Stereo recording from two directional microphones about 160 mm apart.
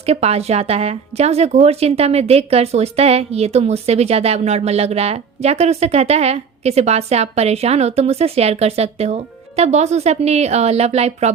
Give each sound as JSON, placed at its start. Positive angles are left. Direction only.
{"t": 0.0, "sound": "a woman's voice", "side_deg": -40}